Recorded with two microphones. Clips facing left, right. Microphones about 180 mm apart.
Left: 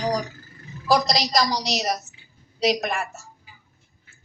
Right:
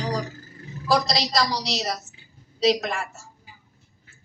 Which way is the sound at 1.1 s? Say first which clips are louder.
Left 2 dB; 25° right (ahead or behind).